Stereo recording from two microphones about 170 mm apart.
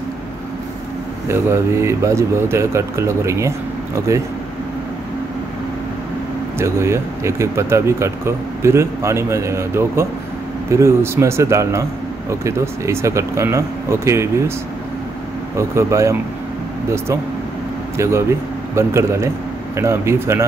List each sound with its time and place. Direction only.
1.3 s speech: 15° right (ahead or behind)
6.6 s speech: 15° right (ahead or behind)
15.5 s speech: 15° right (ahead or behind)
17.9 s speech: 15° right (ahead or behind)